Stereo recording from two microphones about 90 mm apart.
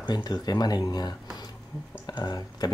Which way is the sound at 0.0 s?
50° left (ahead or behind).